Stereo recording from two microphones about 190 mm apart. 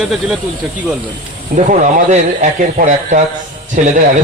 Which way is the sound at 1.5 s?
40° right (ahead or behind).